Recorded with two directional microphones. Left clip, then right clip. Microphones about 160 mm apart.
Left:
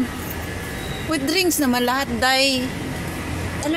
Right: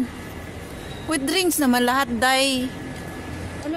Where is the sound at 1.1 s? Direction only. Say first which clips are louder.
Left 1 dB; 35° right (ahead or behind).